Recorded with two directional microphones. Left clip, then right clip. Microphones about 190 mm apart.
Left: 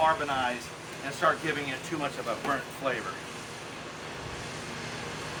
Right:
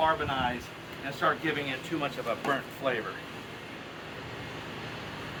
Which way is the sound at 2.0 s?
35° right (ahead or behind).